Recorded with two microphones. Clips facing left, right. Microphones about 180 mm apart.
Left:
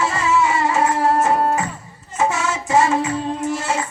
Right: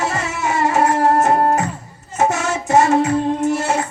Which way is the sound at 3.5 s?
60° right (ahead or behind).